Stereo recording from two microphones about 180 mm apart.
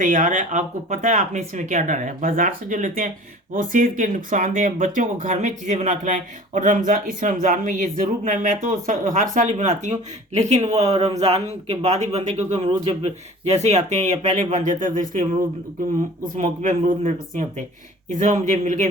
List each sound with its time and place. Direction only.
0.0 s speech: 45° right (ahead or behind)
16.3 s speech: 45° right (ahead or behind)